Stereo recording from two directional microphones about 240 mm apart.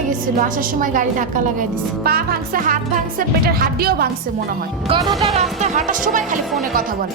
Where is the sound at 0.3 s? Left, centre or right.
Right.